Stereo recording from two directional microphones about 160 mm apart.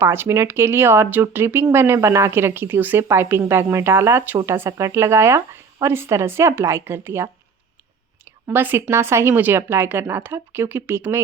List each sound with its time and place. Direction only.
0.0 s speech: 15° right (ahead or behind)